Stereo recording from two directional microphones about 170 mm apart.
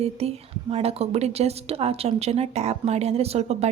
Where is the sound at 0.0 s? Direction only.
35° right (ahead or behind).